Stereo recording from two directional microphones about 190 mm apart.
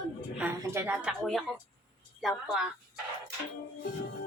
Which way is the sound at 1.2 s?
Centre (ahead or behind).